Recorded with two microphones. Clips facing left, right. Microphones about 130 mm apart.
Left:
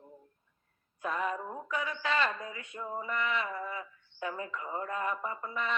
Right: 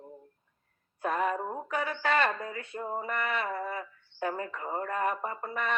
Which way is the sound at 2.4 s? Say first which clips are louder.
Right 5 dB; 35° right (ahead or behind).